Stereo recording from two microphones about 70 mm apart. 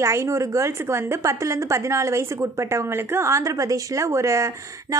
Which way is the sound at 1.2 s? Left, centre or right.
Right.